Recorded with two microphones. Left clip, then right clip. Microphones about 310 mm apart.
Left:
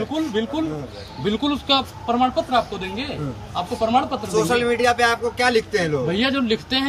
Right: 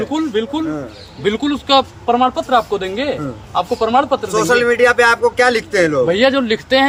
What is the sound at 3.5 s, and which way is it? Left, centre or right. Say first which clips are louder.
Speech: right 6 dB; centre.